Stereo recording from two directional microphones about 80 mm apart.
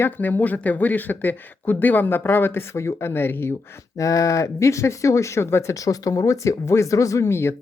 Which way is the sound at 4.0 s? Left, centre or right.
Left.